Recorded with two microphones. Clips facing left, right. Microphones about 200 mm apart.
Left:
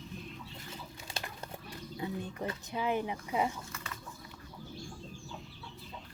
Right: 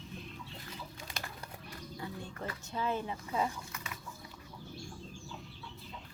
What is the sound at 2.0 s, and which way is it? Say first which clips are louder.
Speech: left 5 dB; 20° left (ahead or behind).